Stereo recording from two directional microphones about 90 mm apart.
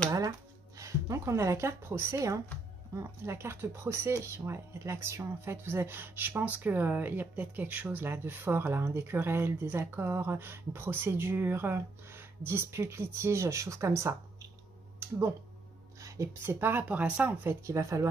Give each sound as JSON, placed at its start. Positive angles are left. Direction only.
{"t": 0.7, "sound": "speech", "side_deg": -35}
{"t": 15.0, "sound": "a sound", "side_deg": -30}
{"t": 16.0, "sound": "speech", "side_deg": -35}
{"t": 17.6, "sound": "speech", "side_deg": -35}